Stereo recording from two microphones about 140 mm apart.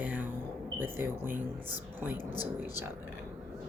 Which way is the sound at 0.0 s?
10° right (ahead or behind).